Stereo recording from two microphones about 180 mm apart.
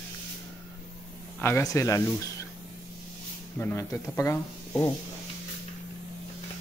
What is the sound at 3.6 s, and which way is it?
Speech, 10° left (ahead or behind).